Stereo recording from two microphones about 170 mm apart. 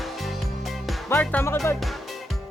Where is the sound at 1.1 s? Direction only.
10° left (ahead or behind).